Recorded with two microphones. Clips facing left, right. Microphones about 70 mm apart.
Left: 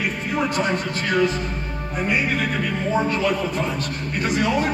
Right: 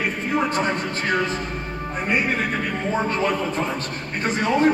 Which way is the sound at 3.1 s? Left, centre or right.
Right.